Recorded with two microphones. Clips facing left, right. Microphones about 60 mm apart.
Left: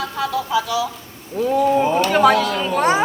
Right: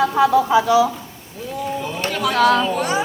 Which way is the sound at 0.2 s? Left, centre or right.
Right.